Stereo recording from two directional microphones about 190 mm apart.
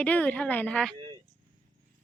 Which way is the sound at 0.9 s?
25° right (ahead or behind).